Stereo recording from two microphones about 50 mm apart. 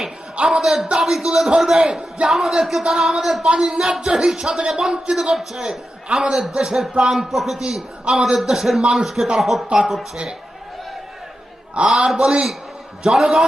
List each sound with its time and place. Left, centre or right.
0.3 s speech: right
0.6 s a man's voice: centre
7.3 s a man's voice: centre
11.9 s a man's voice: centre